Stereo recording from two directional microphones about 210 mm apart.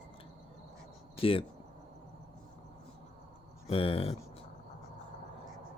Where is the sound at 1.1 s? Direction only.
25° left (ahead or behind).